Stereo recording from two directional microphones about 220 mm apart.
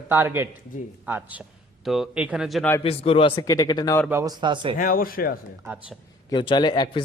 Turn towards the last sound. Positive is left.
turn(degrees=20)  # may be behind; listen again after turning